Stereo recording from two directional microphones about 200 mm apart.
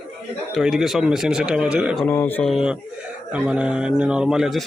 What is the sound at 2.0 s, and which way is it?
Speech, 10° left (ahead or behind).